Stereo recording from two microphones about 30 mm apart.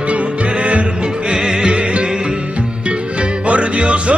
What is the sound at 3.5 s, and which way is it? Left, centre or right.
Music, right.